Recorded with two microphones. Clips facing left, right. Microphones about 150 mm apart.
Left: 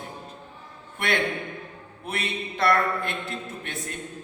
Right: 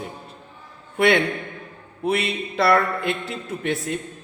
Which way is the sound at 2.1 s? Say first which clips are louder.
Right 8 dB; 80° right.